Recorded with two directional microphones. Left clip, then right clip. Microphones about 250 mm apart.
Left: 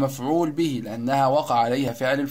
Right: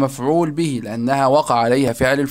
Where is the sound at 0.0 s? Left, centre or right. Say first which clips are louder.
Right 5 dB; right.